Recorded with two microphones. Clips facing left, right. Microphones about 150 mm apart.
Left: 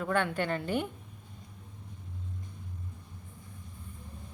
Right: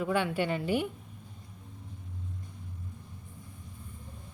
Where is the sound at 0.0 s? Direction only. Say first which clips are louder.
Right 1 dB; 10° right (ahead or behind).